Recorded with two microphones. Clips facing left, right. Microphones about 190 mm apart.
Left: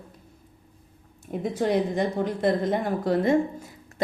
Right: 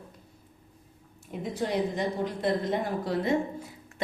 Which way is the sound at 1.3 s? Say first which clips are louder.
Left 5 dB; 55° left (ahead or behind).